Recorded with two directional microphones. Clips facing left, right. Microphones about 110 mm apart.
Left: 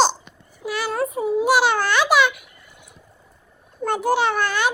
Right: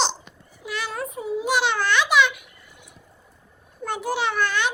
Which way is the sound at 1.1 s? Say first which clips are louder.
Left 5 dB; 55° left (ahead or behind).